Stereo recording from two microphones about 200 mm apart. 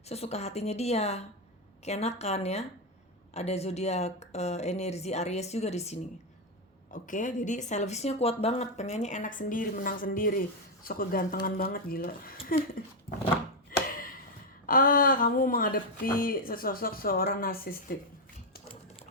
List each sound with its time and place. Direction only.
0.1 s a woman's voice: 30° left (ahead or behind)
13.7 s a sound: 45° left (ahead or behind)
14.7 s speech: 45° left (ahead or behind)